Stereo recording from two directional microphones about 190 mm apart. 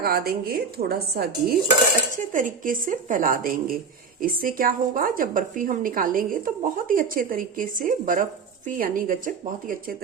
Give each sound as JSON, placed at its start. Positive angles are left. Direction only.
{"t": 0.0, "sound": "a woman's voice", "side_deg": -55}
{"t": 2.1, "sound": "a woman's voice", "side_deg": -45}